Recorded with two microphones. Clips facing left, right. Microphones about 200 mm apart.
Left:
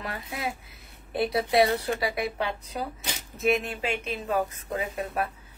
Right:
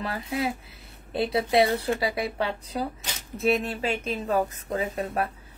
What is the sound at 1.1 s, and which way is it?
A woman's voice, 25° right (ahead or behind).